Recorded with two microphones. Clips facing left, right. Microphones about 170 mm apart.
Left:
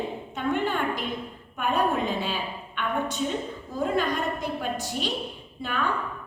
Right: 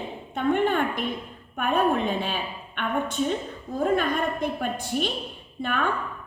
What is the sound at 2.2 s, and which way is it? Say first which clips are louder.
Speech: even; 55° right (ahead or behind).